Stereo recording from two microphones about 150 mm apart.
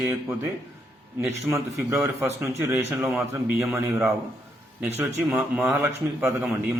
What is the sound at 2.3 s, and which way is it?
A man's voice, 15° right (ahead or behind).